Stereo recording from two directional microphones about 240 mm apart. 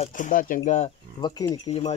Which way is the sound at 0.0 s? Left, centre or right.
Left.